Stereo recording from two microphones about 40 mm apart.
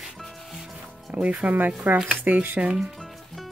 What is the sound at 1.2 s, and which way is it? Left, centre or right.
Speech, right.